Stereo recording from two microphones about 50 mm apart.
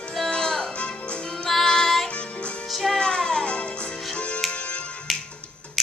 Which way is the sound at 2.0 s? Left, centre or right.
Left.